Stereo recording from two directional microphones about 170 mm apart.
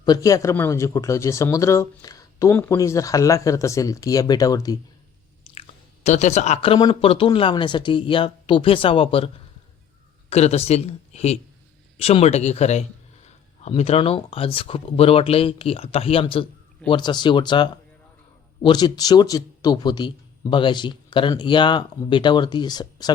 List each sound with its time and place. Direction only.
0.0 s speech: 20° left (ahead or behind)
5.5 s chewing: 45° left (ahead or behind)
6.7 s speech: 30° left (ahead or behind)